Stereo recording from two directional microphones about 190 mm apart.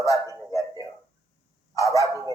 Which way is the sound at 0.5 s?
20° left (ahead or behind).